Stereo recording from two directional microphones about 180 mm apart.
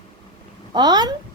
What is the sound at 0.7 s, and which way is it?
Speech, 25° right (ahead or behind).